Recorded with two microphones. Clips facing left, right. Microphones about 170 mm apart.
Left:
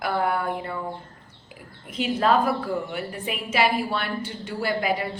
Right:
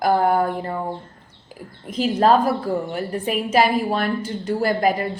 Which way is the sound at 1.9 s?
40° right (ahead or behind).